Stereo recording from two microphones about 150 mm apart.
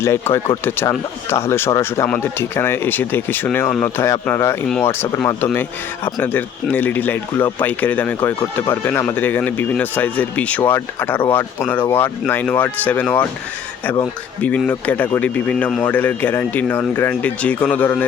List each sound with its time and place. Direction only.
0.0 s speech: 15° left (ahead or behind)
14.7 s speech: 10° left (ahead or behind)